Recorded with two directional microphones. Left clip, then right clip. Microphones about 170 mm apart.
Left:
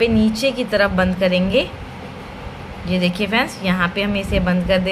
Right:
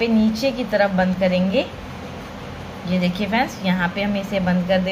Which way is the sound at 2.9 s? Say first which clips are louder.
Left 3 dB; 25° left (ahead or behind).